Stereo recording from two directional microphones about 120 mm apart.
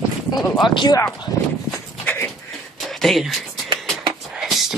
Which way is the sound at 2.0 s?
15° left (ahead or behind).